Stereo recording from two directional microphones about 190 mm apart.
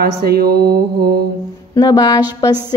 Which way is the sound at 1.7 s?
20° left (ahead or behind).